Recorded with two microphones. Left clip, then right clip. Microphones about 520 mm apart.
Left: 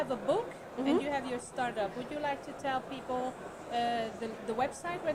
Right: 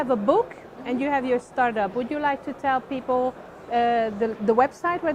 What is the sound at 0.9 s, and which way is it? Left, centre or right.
A woman's voice, right.